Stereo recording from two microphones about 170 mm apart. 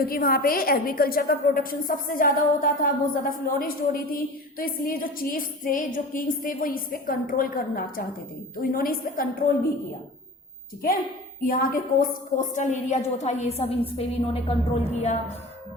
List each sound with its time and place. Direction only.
0.0 s a woman's voice: 60° left (ahead or behind)
11.4 s a woman's voice: 55° left (ahead or behind); by 14.5 s 35° left (ahead or behind)